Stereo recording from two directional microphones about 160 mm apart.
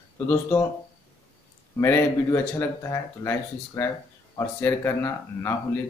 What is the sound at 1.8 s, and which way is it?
Speech, 15° left (ahead or behind).